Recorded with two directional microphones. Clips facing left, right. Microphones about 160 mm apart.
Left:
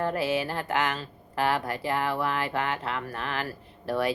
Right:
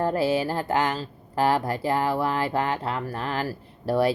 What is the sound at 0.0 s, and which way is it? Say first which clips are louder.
Speech: right 4 dB; 35° right (ahead or behind).